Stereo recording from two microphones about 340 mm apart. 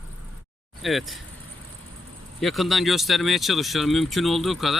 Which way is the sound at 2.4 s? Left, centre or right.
Centre.